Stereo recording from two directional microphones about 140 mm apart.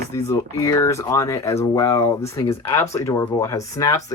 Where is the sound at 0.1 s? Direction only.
20° left (ahead or behind).